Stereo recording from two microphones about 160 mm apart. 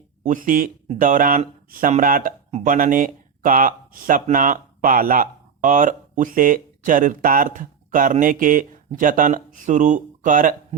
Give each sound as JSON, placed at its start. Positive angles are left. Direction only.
{"t": 0.2, "sound": "speech", "side_deg": -55}